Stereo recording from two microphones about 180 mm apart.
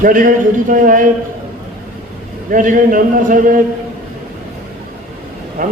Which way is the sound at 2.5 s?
50° right (ahead or behind).